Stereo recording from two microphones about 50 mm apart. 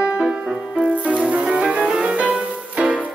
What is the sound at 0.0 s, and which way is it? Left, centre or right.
Music, centre.